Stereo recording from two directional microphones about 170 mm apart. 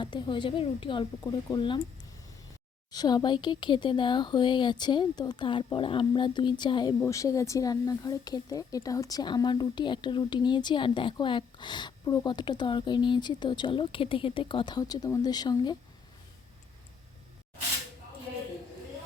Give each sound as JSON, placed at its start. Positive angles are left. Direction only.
{"t": 0.0, "sound": "speech", "side_deg": 25}
{"t": 2.9, "sound": "speech", "side_deg": 25}